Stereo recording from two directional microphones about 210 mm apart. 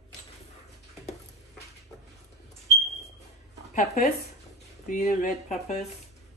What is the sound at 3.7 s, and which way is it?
Speech, 35° left (ahead or behind).